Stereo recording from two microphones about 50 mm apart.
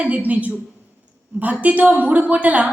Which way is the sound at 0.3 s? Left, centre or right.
Right.